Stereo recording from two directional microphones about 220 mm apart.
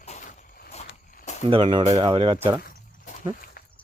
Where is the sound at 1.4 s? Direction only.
20° right (ahead or behind).